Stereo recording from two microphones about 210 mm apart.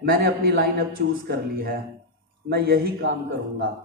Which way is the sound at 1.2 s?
50° right (ahead or behind).